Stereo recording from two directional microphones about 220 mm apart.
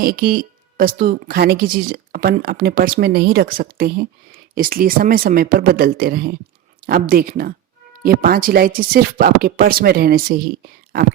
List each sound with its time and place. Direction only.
0.0 s speech: 40° right (ahead or behind)